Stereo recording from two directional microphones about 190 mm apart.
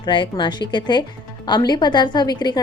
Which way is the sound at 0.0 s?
25° left (ahead or behind).